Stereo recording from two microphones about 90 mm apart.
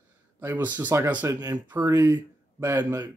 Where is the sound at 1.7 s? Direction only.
25° right (ahead or behind).